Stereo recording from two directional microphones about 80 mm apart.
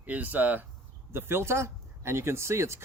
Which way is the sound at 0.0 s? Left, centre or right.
Centre.